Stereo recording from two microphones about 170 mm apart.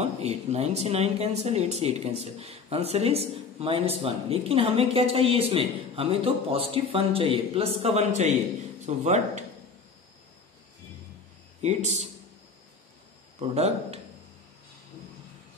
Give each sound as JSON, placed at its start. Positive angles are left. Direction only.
{"t": 0.0, "sound": "speech", "side_deg": -40}
{"t": 11.6, "sound": "speech", "side_deg": -40}
{"t": 13.4, "sound": "speech", "side_deg": -40}